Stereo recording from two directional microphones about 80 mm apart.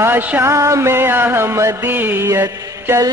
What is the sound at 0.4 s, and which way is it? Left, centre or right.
Music, right.